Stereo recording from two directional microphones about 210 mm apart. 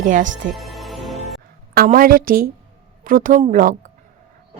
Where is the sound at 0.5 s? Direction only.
Centre (ahead or behind).